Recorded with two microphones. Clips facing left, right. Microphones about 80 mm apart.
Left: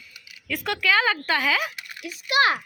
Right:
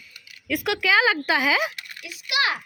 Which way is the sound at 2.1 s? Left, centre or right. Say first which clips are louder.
Left 4 dB; left.